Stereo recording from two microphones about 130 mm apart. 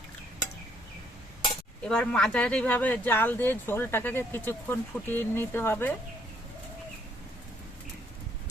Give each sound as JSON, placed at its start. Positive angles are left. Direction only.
{"t": 1.8, "sound": "speech", "side_deg": 5}